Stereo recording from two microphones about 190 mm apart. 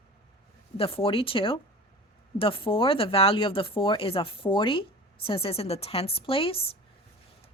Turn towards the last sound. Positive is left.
turn(degrees=30)  # may be behind; listen again after turning